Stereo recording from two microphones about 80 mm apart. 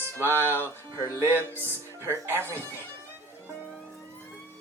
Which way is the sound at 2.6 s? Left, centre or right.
Left.